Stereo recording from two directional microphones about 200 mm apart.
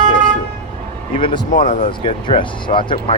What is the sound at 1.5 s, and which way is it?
Speech, 40° left (ahead or behind).